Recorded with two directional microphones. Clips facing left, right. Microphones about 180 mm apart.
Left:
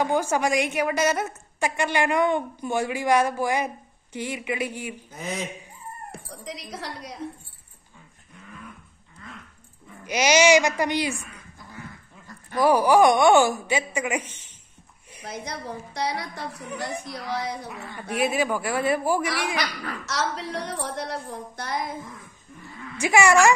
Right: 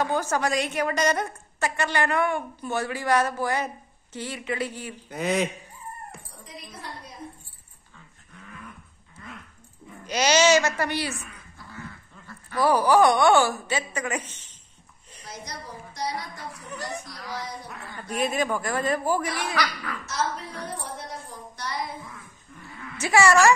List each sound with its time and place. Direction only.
0.0 s a woman's voice: 10° left (ahead or behind)
5.1 s a man's voice: 65° right (ahead or behind)
6.4 s a woman's voice: 80° left
10.0 s a woman's voice: 10° left (ahead or behind)
15.2 s a woman's voice: 60° left (ahead or behind)
18.2 s a woman's voice: 10° left (ahead or behind)
19.2 s a woman's voice: 90° left; by 22.1 s 50° left (ahead or behind)
22.9 s a woman's voice: 15° left (ahead or behind)